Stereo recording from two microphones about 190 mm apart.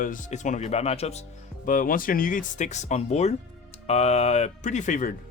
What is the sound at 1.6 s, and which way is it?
Speech, 45° left (ahead or behind).